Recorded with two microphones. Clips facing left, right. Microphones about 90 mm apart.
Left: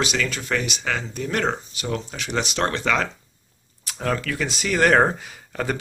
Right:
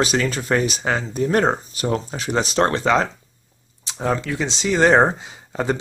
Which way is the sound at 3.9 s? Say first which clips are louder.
Right 3 dB; 20° right (ahead or behind).